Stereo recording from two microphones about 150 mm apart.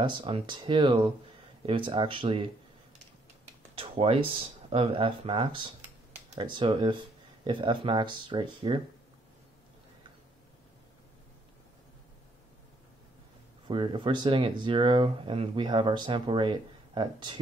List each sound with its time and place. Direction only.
0.0 s speech: 35° right (ahead or behind)
3.7 s speech: 40° right (ahead or behind)
13.7 s speech: 35° right (ahead or behind)